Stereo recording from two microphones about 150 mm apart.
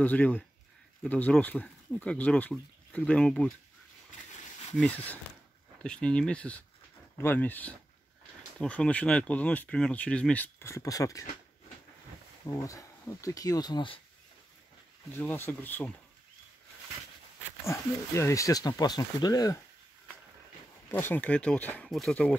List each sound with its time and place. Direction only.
0.0 s speech: 10° left (ahead or behind)
4.7 s speech: 10° left (ahead or behind)
12.4 s speech: 20° left (ahead or behind)
15.1 s speech: 15° left (ahead or behind)
17.6 s speech: 20° left (ahead or behind)
20.9 s speech: 10° left (ahead or behind)